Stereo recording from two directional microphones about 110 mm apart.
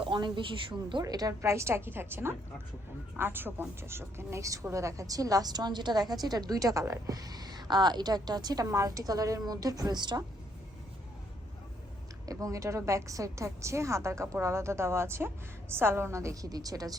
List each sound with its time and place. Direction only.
0.0 s a woman's voice: 45° right (ahead or behind)
12.2 s a woman's voice: 30° right (ahead or behind)